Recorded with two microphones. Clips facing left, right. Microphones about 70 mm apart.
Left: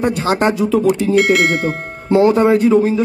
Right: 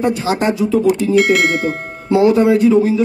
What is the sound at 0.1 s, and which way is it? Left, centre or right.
Speech, left.